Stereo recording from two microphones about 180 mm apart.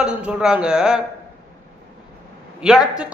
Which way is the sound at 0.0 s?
5° right (ahead or behind).